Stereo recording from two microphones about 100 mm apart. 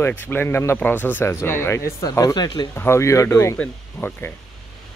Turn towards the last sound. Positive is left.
turn(degrees=20)  # may be behind; listen again after turning